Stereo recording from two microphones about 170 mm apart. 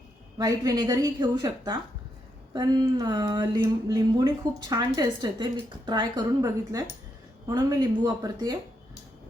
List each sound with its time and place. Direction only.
0.3 s a woman's voice: 20° right (ahead or behind)